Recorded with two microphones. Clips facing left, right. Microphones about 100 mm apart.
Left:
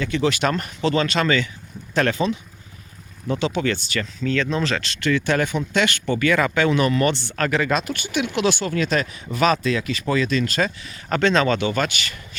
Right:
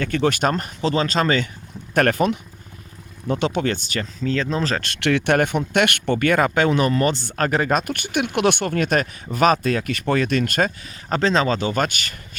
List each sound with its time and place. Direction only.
0.0 s speech: 50° right (ahead or behind)
1.9 s speech: 50° right (ahead or behind)
4.8 s speech: 60° right (ahead or behind)
10.8 s speech: 30° right (ahead or behind)
11.6 s speech: 45° right (ahead or behind)